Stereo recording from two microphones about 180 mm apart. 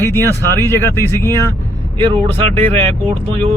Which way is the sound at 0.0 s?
15° left (ahead or behind).